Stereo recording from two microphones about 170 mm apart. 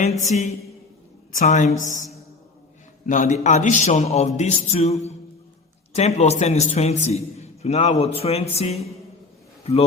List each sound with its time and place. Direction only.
0.3 s a man's voice: 40° left (ahead or behind)
3.1 s a man's voice: 45° left (ahead or behind)